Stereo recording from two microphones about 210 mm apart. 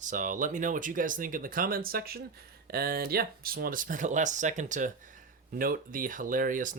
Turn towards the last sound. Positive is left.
turn(degrees=-40)  # may be behind; listen again after turning